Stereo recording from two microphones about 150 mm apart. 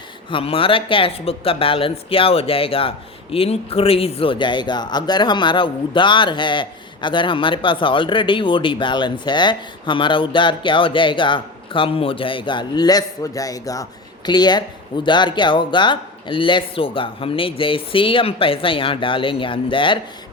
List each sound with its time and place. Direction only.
0.3 s a woman's voice: 35° left (ahead or behind)